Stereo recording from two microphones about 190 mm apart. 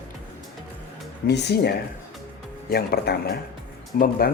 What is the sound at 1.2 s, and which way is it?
Speech, 60° left (ahead or behind).